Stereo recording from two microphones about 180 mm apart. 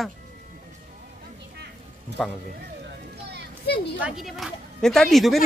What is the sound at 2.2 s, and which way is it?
Speech, centre (ahead or behind).